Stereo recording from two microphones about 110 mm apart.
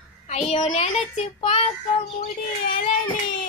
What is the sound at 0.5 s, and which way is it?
Speech, 85° left.